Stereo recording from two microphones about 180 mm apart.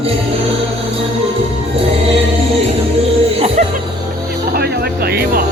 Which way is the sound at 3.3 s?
35° right (ahead or behind).